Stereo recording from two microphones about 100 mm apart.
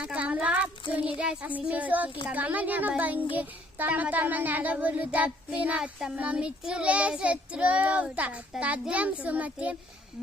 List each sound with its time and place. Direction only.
0.0 s a child's voice: 10° right (ahead or behind)